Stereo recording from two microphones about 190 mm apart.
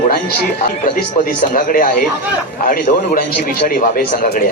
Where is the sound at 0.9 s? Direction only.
45° left (ahead or behind).